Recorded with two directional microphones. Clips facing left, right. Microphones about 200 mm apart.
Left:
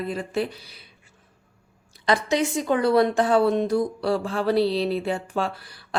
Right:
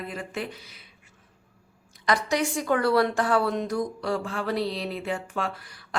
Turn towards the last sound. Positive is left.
turn(degrees=35)  # may be behind; listen again after turning